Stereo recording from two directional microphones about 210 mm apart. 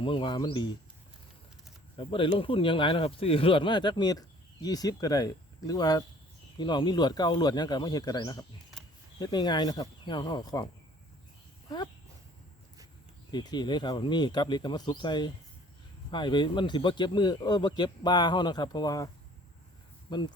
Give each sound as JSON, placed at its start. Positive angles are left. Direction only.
{"t": 0.0, "sound": "speech", "side_deg": 25}
{"t": 2.0, "sound": "speech", "side_deg": 25}
{"t": 13.3, "sound": "speech", "side_deg": 20}